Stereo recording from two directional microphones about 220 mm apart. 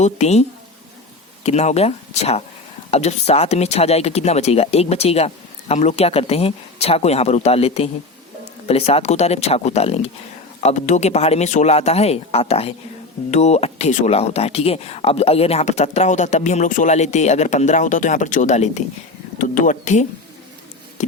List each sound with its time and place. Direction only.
0.0 s speech: 30° left (ahead or behind)
1.5 s speech: 30° left (ahead or behind)